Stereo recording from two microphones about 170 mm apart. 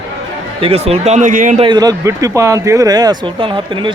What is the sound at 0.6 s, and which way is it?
Speech, 35° right (ahead or behind).